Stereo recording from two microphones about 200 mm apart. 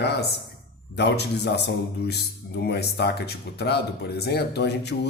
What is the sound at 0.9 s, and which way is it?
Speech, 55° left (ahead or behind).